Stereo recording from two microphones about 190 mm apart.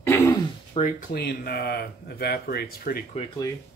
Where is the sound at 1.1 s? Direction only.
55° left (ahead or behind).